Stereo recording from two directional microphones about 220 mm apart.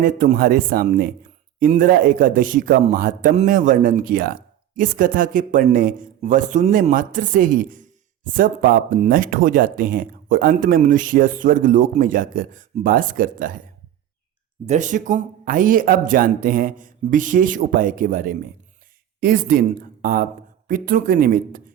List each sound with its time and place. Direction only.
0.0 s a man's voice: 40° right (ahead or behind)
14.7 s a man's voice: 35° right (ahead or behind)